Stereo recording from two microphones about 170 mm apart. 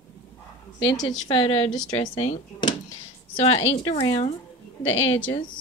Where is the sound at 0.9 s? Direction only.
25° left (ahead or behind).